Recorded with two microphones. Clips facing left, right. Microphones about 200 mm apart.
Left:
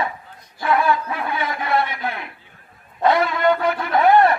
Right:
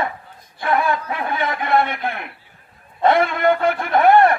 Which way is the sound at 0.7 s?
50° right (ahead or behind).